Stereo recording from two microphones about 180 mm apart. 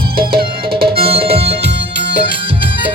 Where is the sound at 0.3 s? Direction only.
60° right (ahead or behind).